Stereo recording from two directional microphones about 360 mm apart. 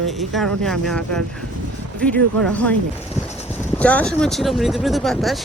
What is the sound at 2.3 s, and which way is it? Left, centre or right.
Speech, centre.